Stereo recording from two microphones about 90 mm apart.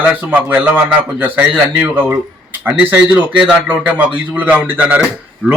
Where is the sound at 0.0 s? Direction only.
15° right (ahead or behind).